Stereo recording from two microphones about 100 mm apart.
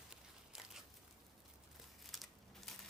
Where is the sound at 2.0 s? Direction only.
Centre (ahead or behind).